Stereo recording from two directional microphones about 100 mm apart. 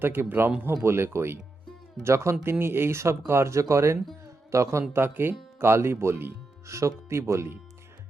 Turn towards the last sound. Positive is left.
turn(degrees=-30)  # may be behind; listen again after turning